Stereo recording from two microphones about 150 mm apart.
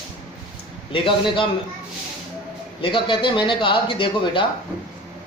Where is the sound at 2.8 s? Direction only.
35° left (ahead or behind).